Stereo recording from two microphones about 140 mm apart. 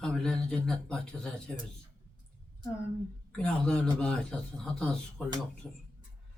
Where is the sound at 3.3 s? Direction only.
5° left (ahead or behind).